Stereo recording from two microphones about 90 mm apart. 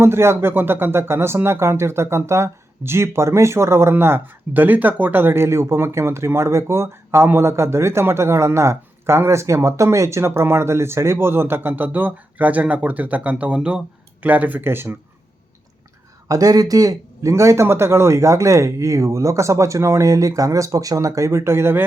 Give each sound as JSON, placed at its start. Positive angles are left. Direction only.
{"t": 0.0, "sound": "speech", "side_deg": -30}
{"t": 16.3, "sound": "speech", "side_deg": -45}